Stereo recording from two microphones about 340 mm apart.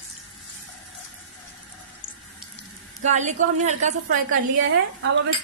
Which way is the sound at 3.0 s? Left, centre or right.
Right.